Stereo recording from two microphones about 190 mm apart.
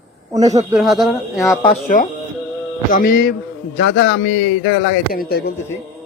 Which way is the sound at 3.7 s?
85° left.